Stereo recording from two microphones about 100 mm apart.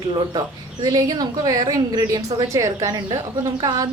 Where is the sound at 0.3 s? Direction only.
40° right (ahead or behind).